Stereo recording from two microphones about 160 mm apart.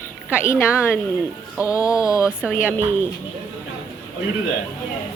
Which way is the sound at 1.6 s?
20° left (ahead or behind).